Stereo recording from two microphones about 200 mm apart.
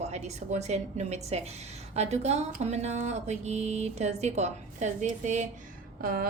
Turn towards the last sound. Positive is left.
turn(degrees=-45)  # may be behind; listen again after turning